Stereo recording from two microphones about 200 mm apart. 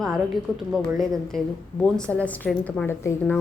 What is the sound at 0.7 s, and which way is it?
Speech, centre (ahead or behind).